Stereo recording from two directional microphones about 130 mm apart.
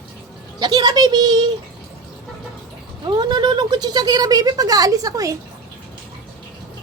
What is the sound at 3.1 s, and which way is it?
Speech, 30° right (ahead or behind).